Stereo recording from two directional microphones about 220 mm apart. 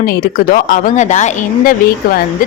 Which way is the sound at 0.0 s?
40° left (ahead or behind).